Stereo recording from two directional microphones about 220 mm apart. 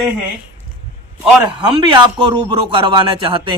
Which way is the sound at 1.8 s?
20° right (ahead or behind).